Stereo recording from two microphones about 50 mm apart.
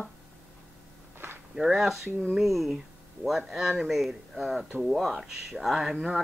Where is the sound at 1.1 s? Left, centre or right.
Right.